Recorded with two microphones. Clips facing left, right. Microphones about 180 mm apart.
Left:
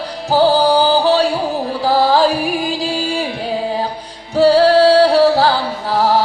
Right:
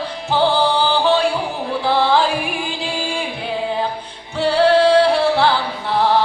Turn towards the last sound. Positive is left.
turn(degrees=40)  # may be behind; listen again after turning